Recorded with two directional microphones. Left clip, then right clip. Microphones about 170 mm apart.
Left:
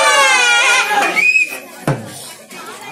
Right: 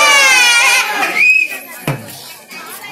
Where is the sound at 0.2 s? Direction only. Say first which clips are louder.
Right 2 dB; 55° left (ahead or behind).